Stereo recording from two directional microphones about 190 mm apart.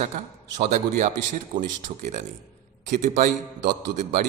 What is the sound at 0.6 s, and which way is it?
A man's voice, 40° right (ahead or behind).